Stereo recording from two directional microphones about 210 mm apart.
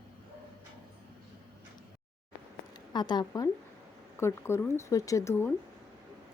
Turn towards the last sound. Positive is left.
turn(degrees=10)  # may be behind; listen again after turning